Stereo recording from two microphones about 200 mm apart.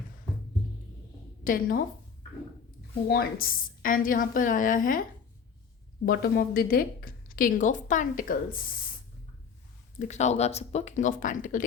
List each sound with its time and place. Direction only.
1.5 s speech: 45° left (ahead or behind)
3.1 s speech: 50° left (ahead or behind)
6.1 s speech: 50° left (ahead or behind)
10.0 s speech: 35° left (ahead or behind)